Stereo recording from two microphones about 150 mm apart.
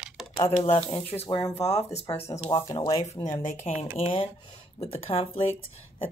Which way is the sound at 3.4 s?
55° left (ahead or behind).